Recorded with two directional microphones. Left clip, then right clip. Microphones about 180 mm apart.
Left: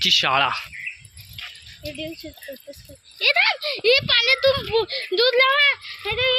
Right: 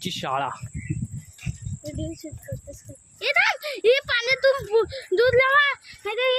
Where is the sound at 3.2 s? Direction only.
45° right (ahead or behind).